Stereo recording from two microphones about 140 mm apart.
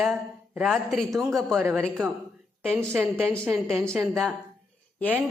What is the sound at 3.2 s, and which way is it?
A woman's voice, 5° left (ahead or behind).